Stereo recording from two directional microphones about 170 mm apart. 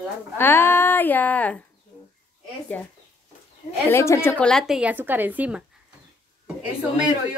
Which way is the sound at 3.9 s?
15° left (ahead or behind).